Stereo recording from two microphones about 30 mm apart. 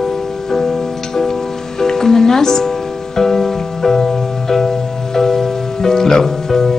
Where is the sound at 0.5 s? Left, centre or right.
Centre.